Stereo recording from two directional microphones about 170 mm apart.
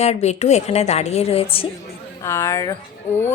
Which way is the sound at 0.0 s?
40° left (ahead or behind).